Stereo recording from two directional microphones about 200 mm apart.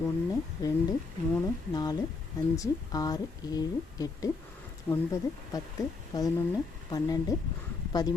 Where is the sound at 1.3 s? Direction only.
20° left (ahead or behind).